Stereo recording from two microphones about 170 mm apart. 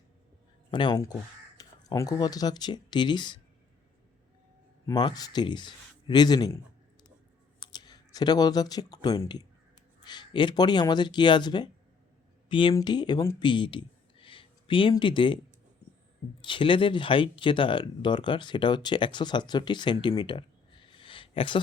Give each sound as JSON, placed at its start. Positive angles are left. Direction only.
{"t": 0.7, "sound": "speech", "side_deg": 25}
{"t": 4.9, "sound": "speech", "side_deg": 25}
{"t": 7.6, "sound": "speech", "side_deg": 25}
{"t": 16.4, "sound": "speech", "side_deg": 30}